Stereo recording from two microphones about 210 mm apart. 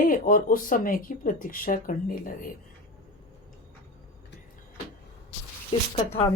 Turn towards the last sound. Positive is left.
turn(degrees=25)  # may be behind; listen again after turning